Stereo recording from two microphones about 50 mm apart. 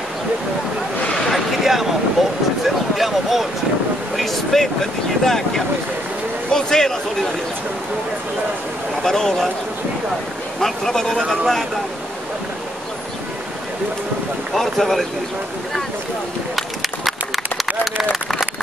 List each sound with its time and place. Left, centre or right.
1.3 s a sound: centre
4.2 s speech: centre
9.0 s speech: centre
10.6 s speech: centre
14.5 s speech: centre
16.5 s run: centre